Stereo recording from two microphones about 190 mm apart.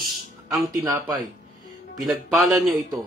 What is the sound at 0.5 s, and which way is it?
Speech, 15° right (ahead or behind).